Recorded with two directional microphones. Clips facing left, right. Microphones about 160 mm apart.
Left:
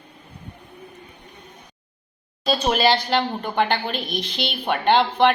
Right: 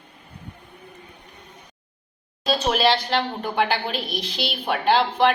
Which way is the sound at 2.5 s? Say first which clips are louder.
Left 1 dB; centre (ahead or behind).